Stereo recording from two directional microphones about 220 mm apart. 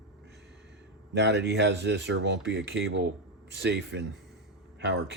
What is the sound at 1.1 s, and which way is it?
Speech, 50° right (ahead or behind).